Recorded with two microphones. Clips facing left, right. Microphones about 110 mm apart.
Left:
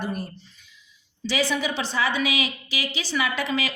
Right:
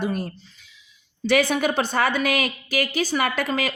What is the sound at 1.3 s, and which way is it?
Speech, 55° right (ahead or behind).